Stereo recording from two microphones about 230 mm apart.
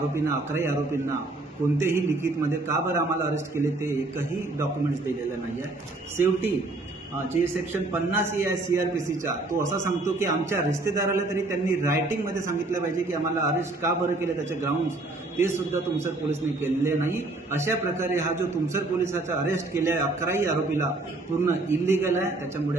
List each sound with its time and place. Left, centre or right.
0.1 s a man's voice: centre
1.8 s a man's voice: centre
6.1 s a man's voice: centre
7.7 s a man's voice: centre
9.5 s a man's voice: right
9.8 s a man's voice: centre